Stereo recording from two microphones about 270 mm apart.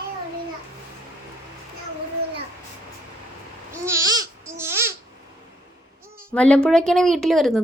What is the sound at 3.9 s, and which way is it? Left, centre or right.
Babbling, centre.